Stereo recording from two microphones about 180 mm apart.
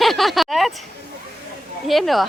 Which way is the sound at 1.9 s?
Centre (ahead or behind).